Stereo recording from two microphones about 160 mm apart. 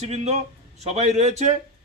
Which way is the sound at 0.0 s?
40° right (ahead or behind).